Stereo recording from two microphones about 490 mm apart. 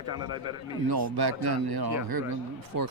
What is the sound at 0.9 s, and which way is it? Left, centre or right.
Speech, right.